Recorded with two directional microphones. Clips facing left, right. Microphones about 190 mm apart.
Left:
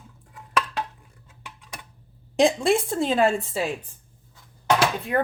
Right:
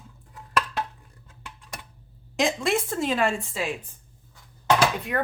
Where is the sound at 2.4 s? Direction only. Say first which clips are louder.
Left 5 dB; 30° left (ahead or behind).